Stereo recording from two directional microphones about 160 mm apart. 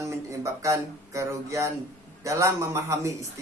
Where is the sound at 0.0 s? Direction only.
20° right (ahead or behind).